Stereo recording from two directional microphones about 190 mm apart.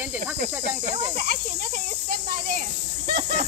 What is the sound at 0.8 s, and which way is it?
Speech, 35° right (ahead or behind).